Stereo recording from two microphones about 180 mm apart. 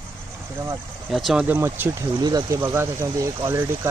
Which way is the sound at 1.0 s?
Centre (ahead or behind).